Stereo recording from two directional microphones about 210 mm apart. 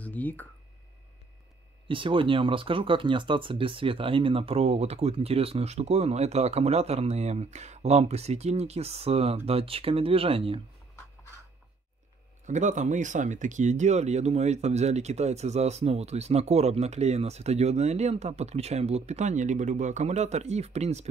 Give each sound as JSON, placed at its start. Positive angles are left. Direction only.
{"t": 0.0, "sound": "a sound", "side_deg": 10}
{"t": 1.9, "sound": "speech", "side_deg": -25}
{"t": 12.4, "sound": "speech", "side_deg": -35}